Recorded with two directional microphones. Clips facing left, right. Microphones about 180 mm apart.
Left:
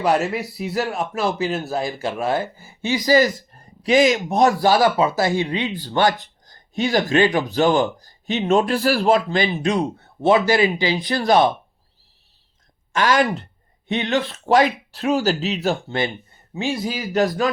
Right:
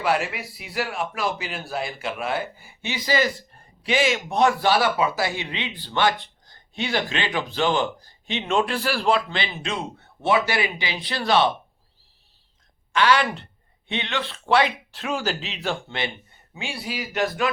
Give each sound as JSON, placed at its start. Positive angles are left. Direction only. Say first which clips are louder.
{"t": 0.0, "sound": "a man's voice", "louder": "left 5 dB", "side_deg": 40}
{"t": 12.9, "sound": "a man's voice", "louder": "left 2 dB", "side_deg": 40}